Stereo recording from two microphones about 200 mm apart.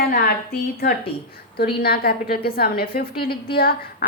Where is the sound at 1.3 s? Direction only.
50° left (ahead or behind).